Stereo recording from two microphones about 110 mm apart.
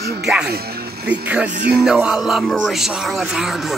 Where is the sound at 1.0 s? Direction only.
15° right (ahead or behind).